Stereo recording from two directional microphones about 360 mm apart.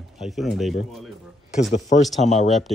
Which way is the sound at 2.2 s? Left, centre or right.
Centre.